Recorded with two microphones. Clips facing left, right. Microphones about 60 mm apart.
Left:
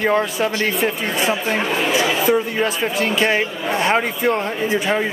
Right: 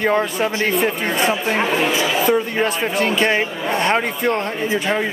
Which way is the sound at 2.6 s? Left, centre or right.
Centre.